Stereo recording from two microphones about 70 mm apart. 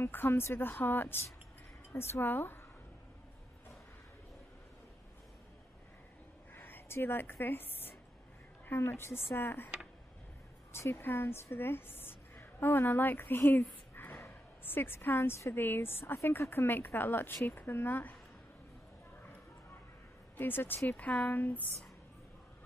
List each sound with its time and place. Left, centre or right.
0.0 s speech: left
6.5 s speech: left
10.7 s a woman's voice: left
13.9 s snort: left
14.2 s a woman's voice: left
20.3 s a woman's voice: left